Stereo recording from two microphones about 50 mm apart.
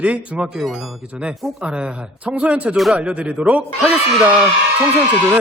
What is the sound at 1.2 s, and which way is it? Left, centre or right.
Speech, right.